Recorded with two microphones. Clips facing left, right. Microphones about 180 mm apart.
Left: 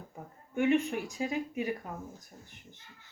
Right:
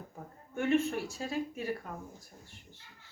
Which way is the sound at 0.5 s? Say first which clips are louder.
Left 2 dB; 15° left (ahead or behind).